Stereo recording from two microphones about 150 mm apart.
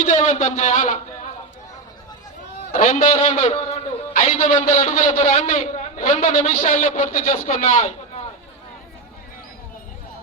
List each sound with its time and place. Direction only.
0.0 s a man's voice: 55° left (ahead or behind)
2.7 s a man's voice: 55° left (ahead or behind)